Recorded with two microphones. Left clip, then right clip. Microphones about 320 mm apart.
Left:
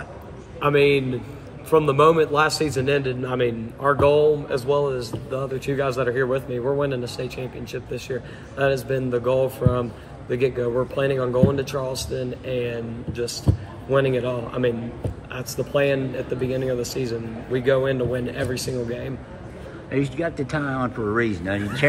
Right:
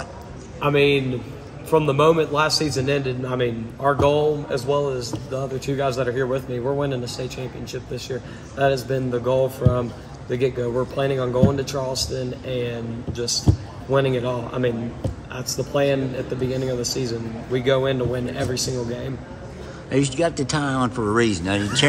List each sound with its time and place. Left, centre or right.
0.6 s a man's voice: centre
13.8 s a man's voice: centre